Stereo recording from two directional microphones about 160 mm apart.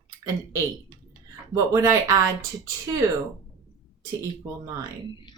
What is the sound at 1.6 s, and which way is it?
Speech, 20° right (ahead or behind).